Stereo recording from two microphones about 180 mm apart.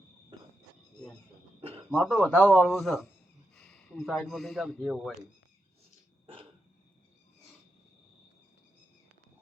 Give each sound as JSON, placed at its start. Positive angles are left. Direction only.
{"t": 0.3, "sound": "insect", "side_deg": -30}
{"t": 1.9, "sound": "speech", "side_deg": 0}
{"t": 6.2, "sound": "dog", "side_deg": -30}